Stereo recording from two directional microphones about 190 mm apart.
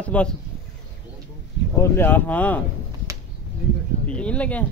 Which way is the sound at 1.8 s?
10° left (ahead or behind).